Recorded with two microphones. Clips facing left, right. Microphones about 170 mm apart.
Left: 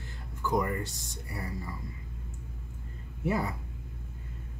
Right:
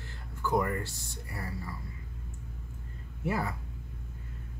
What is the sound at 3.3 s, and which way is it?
Speech, 20° left (ahead or behind).